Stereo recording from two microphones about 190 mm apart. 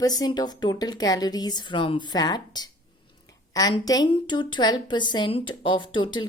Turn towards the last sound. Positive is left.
turn(degrees=25)  # may be behind; listen again after turning